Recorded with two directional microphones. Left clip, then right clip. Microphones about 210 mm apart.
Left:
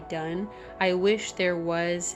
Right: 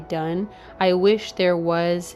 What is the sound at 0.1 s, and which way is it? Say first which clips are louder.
Speech: right 6 dB; 30° right (ahead or behind).